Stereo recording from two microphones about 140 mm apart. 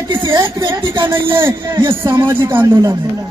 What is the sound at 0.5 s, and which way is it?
Speech, 35° right (ahead or behind).